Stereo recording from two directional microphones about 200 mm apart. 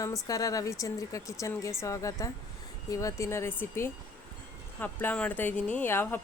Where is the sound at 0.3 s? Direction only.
15° left (ahead or behind).